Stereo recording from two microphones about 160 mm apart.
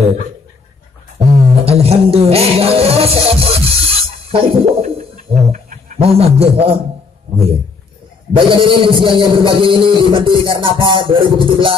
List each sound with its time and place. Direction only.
1.1 s music: 40° right (ahead or behind)
5.3 s bird: 55° right (ahead or behind)
5.9 s music: 40° right (ahead or behind)
8.4 s music: 30° right (ahead or behind)